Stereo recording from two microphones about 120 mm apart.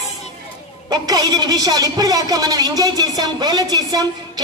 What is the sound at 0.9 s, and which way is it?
A woman's voice, 35° right (ahead or behind).